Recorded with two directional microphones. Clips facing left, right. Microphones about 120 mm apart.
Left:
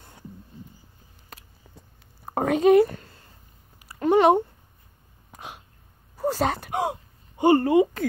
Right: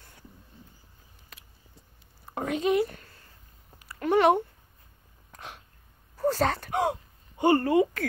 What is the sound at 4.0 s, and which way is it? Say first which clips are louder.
Speech: left 4 dB; 25° left (ahead or behind).